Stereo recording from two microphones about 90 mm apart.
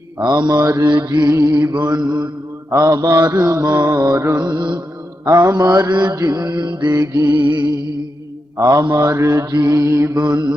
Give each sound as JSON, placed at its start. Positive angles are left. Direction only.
{"t": 0.2, "sound": "music", "side_deg": -50}
{"t": 0.6, "sound": "mantra", "side_deg": -35}
{"t": 0.9, "sound": "music", "side_deg": -50}
{"t": 2.6, "sound": "mantra", "side_deg": -40}
{"t": 4.5, "sound": "mantra", "side_deg": -60}
{"t": 5.2, "sound": "music", "side_deg": -45}
{"t": 6.1, "sound": "music", "side_deg": -40}
{"t": 8.5, "sound": "mantra", "side_deg": -40}